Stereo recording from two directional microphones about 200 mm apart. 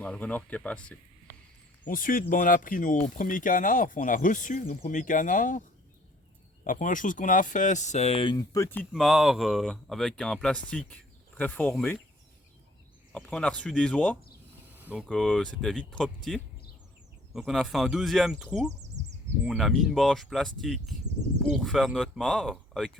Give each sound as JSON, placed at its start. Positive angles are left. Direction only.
{"t": 0.0, "sound": "speech", "side_deg": 5}
{"t": 1.8, "sound": "speech", "side_deg": 45}
{"t": 6.7, "sound": "speech", "side_deg": 40}
{"t": 8.9, "sound": "speech", "side_deg": 0}
{"t": 13.1, "sound": "speech", "side_deg": 5}
{"t": 14.8, "sound": "speech", "side_deg": -5}